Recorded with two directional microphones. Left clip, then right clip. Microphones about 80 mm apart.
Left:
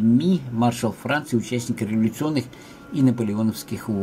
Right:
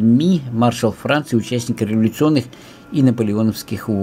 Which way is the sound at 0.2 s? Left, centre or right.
Right.